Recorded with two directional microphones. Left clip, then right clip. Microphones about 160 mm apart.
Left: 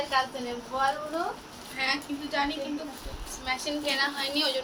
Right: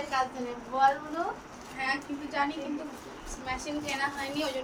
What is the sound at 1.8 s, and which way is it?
A woman's voice, 10° right (ahead or behind).